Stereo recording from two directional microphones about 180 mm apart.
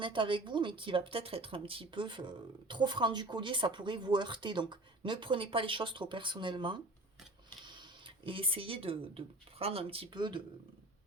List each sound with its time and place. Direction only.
0.0 s speech: 25° right (ahead or behind)